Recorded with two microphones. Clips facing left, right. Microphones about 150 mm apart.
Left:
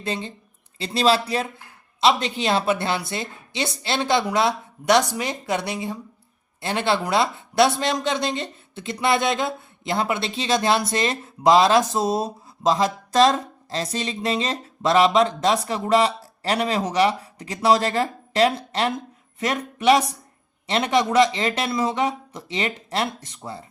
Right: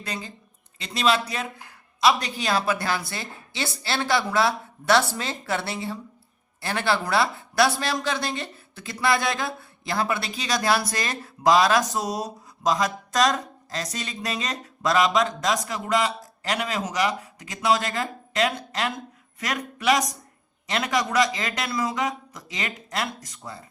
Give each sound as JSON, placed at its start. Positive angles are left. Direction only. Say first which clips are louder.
{"t": 0.0, "sound": "a woman's voice", "louder": "left 6 dB", "side_deg": 25}